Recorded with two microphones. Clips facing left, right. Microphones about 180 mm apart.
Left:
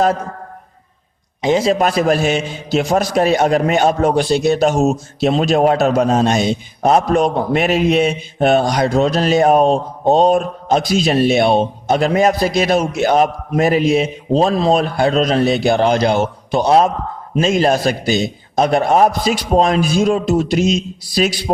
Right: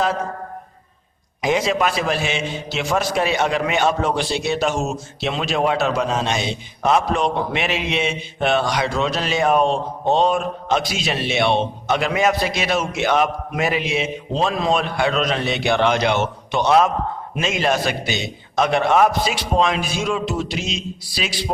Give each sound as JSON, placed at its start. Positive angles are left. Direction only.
{"t": 1.4, "sound": "a man's voice", "side_deg": 30}